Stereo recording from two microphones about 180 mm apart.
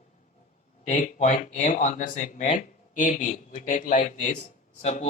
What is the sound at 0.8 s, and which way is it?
Speech, 40° left (ahead or behind).